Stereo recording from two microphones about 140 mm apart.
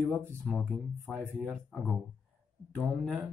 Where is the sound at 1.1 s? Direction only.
5° right (ahead or behind).